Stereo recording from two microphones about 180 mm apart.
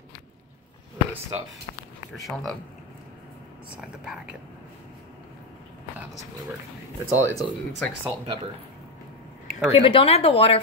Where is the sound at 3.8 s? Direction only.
5° right (ahead or behind).